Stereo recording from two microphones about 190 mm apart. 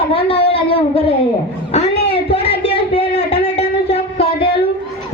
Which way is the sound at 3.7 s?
30° left (ahead or behind).